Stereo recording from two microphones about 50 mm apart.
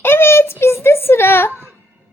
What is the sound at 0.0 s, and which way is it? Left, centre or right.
Child singing, left.